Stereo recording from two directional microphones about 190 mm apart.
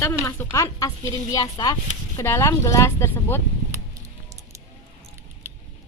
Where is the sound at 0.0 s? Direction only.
10° left (ahead or behind).